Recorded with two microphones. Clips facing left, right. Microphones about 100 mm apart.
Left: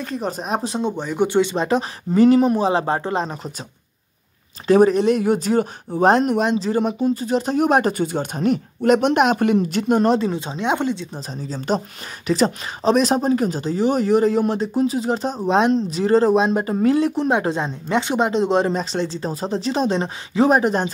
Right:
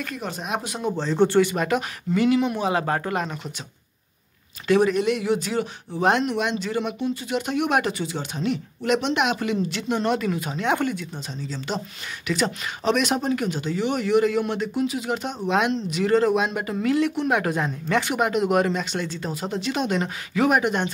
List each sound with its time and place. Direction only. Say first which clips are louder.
0.0 s speech: left 5 dB; 35° left (ahead or behind)
1.0 s speech: right 1 dB; 10° left (ahead or behind); by 3.5 s 30° left (ahead or behind)
4.6 s speech: left 5 dB; 35° left (ahead or behind)
10.1 s speech: left 4 dB; 30° left (ahead or behind)
11.1 s speech: left 3 dB; 40° left (ahead or behind)